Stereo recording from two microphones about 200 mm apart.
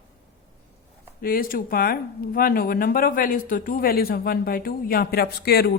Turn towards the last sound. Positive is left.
turn(degrees=50)  # may be behind; listen again after turning